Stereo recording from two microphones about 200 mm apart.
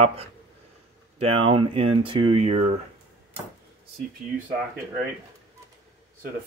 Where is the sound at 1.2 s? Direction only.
30° right (ahead or behind).